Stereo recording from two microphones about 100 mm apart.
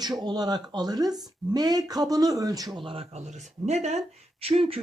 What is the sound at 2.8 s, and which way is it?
Speech, 75° right (ahead or behind).